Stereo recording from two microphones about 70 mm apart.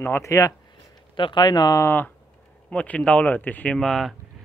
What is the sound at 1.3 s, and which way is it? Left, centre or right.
Speech, left.